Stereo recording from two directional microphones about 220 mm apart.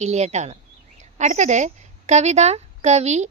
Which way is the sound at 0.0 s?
30° right (ahead or behind).